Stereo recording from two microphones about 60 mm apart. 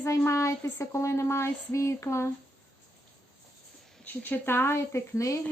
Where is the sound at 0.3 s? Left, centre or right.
Left.